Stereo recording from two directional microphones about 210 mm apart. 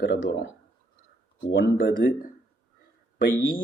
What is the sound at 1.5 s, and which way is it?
Speech, 60° left (ahead or behind).